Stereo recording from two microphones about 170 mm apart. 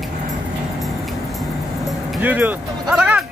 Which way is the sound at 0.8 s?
Centre (ahead or behind).